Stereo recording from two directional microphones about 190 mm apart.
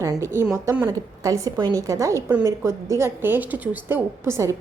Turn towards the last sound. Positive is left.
turn(degrees=-15)  # may be behind; listen again after turning